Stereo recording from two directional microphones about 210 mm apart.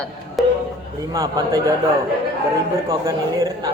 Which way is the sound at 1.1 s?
15° right (ahead or behind).